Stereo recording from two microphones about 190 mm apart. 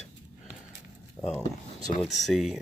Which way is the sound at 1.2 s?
15° left (ahead or behind).